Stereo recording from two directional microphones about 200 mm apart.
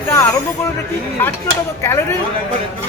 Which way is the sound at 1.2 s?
10° left (ahead or behind).